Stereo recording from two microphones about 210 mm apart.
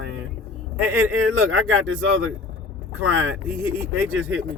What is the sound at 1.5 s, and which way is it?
Speech, 70° right (ahead or behind).